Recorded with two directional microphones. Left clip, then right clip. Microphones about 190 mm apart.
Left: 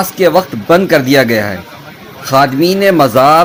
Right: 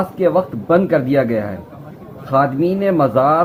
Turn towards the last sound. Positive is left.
turn(degrees=40)  # may be behind; listen again after turning